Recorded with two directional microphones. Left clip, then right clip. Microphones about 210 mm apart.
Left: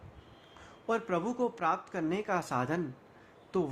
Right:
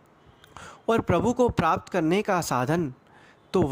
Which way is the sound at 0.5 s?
40° right (ahead or behind).